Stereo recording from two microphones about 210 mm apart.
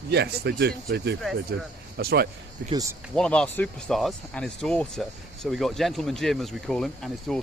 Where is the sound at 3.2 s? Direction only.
5° left (ahead or behind).